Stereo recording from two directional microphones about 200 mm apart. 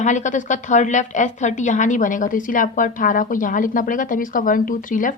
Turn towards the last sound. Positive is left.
turn(degrees=40)  # may be behind; listen again after turning